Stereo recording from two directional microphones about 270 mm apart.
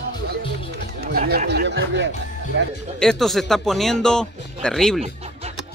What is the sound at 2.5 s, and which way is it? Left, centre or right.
Speech, right.